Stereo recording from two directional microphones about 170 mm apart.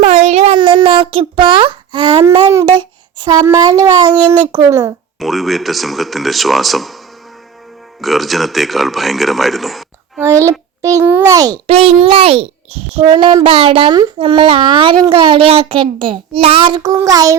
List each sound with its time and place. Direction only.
0.0 s child singing: 40° right (ahead or behind)
2.5 s a sound: 20° right (ahead or behind)
3.2 s a child's voice: 20° right (ahead or behind)
5.2 s a man's voice: centre (ahead or behind)
8.0 s a man's voice: centre (ahead or behind)
10.2 s a child's voice: 15° right (ahead or behind)
11.7 s a child's voice: 35° right (ahead or behind)